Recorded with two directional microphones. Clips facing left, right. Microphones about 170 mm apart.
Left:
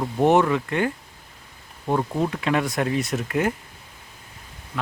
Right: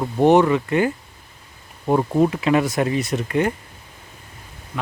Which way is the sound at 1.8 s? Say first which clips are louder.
Right 6 dB; 20° right (ahead or behind).